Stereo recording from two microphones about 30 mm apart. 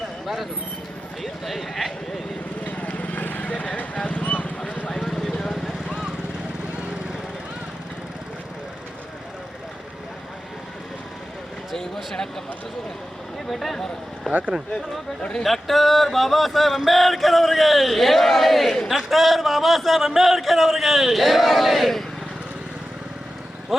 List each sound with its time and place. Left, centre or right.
1.2 s music: centre
2.6 s vehicle: left
3.4 s vehicle: left
4.0 s clip-clop: left
4.9 s vehicle: centre
13.5 s music: centre
15.2 s speech: left
15.4 s music: centre